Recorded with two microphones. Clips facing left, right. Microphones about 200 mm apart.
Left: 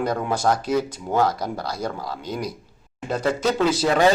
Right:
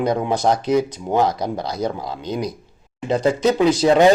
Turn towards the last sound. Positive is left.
turn(degrees=-20)  # may be behind; listen again after turning